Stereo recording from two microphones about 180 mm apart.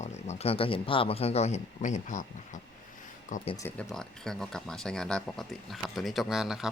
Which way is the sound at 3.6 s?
5° left (ahead or behind).